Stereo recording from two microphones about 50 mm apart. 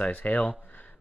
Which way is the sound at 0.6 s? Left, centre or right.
Left.